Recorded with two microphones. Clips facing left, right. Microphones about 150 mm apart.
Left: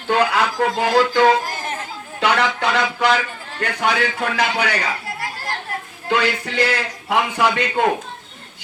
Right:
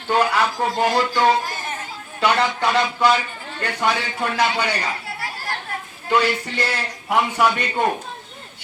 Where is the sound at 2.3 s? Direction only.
90° left.